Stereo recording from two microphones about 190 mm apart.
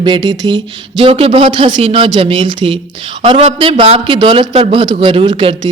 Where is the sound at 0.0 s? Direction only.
25° right (ahead or behind).